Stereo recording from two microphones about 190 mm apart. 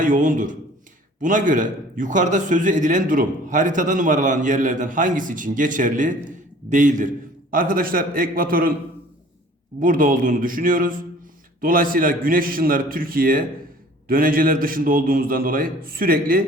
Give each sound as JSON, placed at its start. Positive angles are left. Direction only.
{"t": 0.0, "sound": "a man's voice", "side_deg": -45}
{"t": 9.8, "sound": "a man's voice", "side_deg": -45}